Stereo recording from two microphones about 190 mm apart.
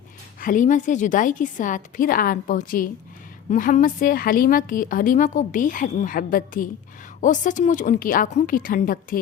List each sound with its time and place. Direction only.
0.3 s a woman's voice: 45° left (ahead or behind)